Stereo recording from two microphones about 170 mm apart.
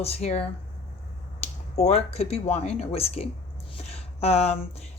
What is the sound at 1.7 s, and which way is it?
Speech, 40° left (ahead or behind).